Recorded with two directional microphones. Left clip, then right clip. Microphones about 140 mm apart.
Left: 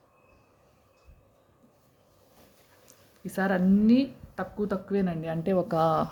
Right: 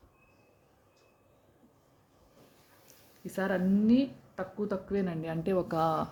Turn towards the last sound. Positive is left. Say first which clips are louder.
# left 5 dB
turn(degrees=30)  # may be behind; listen again after turning